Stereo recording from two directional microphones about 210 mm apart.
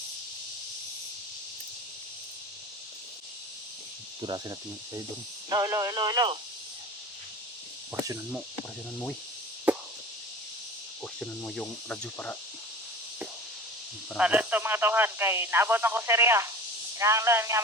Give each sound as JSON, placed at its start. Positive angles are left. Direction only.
{"t": 4.2, "sound": "cricket", "side_deg": -20}
{"t": 5.5, "sound": "speech", "side_deg": -15}
{"t": 9.7, "sound": "chop", "side_deg": -5}
{"t": 11.0, "sound": "cricket", "side_deg": 5}
{"t": 14.2, "sound": "speech", "side_deg": -5}